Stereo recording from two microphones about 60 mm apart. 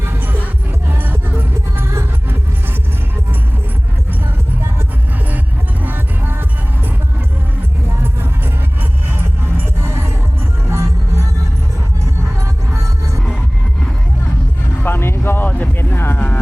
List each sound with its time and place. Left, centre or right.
0.9 s music: right
5.8 s music: right
9.1 s music: right
12.7 s music: right
14.8 s a sound: left
15.8 s vehicle: left